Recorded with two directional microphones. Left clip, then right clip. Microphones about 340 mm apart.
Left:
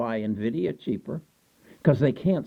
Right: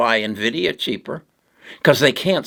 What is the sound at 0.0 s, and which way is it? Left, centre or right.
Speech, centre.